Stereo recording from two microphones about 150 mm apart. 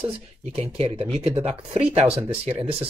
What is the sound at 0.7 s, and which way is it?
Speech, 40° right (ahead or behind).